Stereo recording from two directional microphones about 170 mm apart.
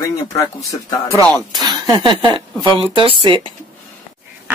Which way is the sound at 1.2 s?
5° left (ahead or behind).